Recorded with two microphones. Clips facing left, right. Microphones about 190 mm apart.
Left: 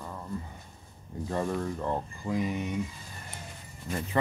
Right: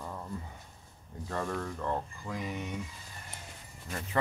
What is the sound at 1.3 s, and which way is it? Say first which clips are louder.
Speech: left 4 dB; 15° left (ahead or behind).